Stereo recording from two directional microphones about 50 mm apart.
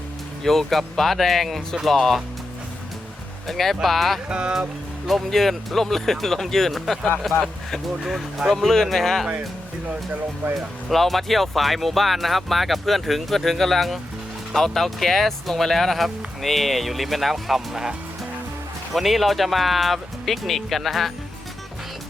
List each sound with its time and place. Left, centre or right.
0.4 s speech: centre
3.4 s speech: centre
4.3 s speech: centre
5.0 s speech: centre
10.8 s speech: centre
18.9 s speech: centre